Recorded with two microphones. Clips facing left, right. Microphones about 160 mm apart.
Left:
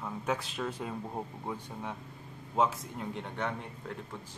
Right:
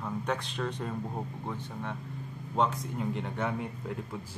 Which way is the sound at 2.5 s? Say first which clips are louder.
Right 1 dB; centre (ahead or behind).